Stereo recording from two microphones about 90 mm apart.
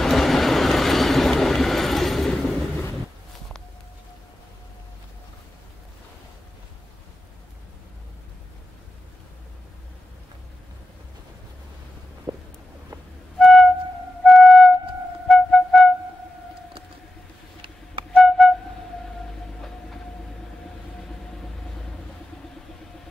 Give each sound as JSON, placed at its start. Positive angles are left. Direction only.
{"t": 0.0, "sound": "train", "side_deg": 0}
{"t": 12.3, "sound": "a sound", "side_deg": -50}
{"t": 13.4, "sound": "flute", "side_deg": 0}
{"t": 18.1, "sound": "flute", "side_deg": 0}